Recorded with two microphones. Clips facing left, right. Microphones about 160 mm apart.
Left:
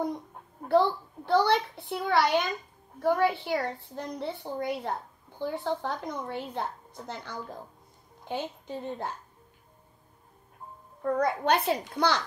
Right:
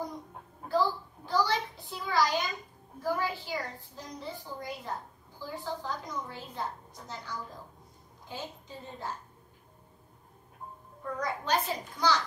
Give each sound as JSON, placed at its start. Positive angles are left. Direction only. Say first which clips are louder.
{"t": 0.7, "sound": "a child's voice", "louder": "left 5 dB", "side_deg": 65}
{"t": 11.1, "sound": "a woman's voice", "louder": "left 7 dB", "side_deg": 60}